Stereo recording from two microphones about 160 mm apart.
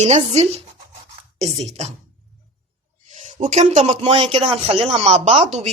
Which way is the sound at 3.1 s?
50° right (ahead or behind).